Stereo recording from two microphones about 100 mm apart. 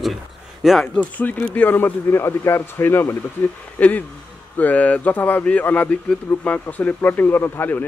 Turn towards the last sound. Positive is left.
turn(degrees=20)  # may be behind; listen again after turning